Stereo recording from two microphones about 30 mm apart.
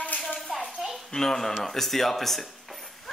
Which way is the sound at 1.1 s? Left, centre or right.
Centre.